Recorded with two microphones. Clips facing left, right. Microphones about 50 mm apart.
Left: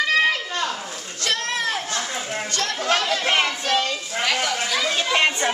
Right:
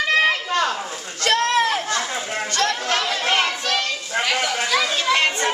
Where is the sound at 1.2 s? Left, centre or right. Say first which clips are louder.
Right 6 dB; right.